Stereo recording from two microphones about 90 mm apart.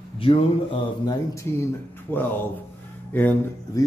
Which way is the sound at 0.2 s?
90° left.